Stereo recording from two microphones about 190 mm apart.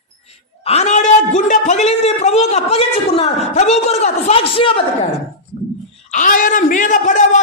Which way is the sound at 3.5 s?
35° left (ahead or behind).